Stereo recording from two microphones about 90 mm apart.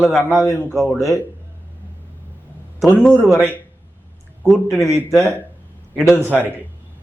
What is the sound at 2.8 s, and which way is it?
Speech, centre (ahead or behind).